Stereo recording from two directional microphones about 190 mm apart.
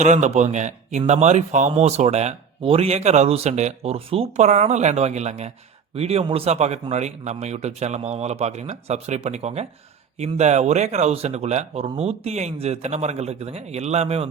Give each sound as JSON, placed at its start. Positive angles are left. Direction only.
{"t": 0.0, "sound": "speech", "side_deg": -40}